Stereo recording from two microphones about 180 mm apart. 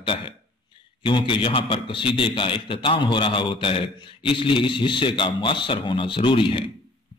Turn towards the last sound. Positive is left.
turn(degrees=30)  # may be behind; listen again after turning